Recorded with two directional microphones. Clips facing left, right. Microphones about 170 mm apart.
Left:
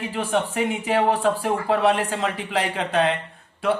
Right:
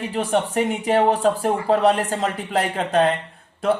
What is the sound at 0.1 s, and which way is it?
Speech, 40° right (ahead or behind).